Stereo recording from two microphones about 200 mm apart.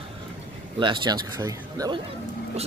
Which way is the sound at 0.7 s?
25° right (ahead or behind).